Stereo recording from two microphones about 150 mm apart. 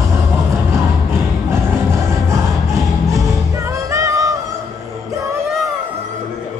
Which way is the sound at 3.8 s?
20° right (ahead or behind).